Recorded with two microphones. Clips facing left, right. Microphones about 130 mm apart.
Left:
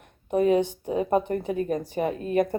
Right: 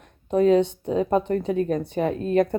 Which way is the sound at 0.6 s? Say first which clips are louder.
Right 3 dB; 70° right (ahead or behind).